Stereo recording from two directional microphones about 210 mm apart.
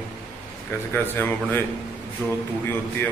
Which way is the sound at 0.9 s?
10° left (ahead or behind).